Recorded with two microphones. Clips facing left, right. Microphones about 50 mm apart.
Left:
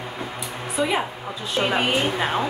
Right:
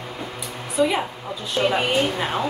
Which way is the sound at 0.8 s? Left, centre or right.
Centre.